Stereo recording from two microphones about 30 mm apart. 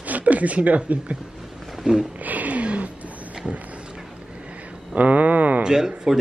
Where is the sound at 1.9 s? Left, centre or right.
Right.